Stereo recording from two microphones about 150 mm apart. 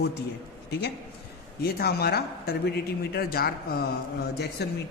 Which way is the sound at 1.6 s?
90° left.